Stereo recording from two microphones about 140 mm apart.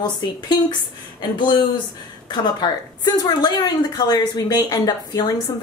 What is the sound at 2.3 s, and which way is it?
A woman's voice, 30° left (ahead or behind).